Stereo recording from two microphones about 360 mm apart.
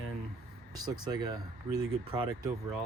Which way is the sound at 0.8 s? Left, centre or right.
Centre.